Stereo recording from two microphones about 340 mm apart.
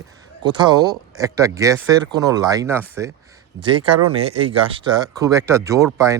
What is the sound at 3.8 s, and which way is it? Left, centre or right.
Speech, right.